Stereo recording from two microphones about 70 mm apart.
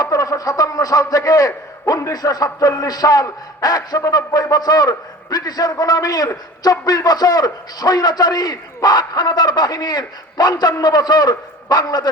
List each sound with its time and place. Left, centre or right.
0.0 s a man's voice: left